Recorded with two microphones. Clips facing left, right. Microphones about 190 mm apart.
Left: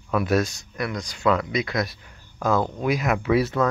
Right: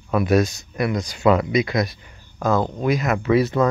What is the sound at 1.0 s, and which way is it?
Speech, 5° right (ahead or behind).